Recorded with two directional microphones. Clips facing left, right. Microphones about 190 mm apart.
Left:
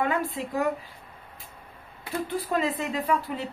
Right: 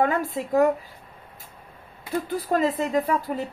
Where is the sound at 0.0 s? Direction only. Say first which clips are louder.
Right 4 dB; 45° right (ahead or behind).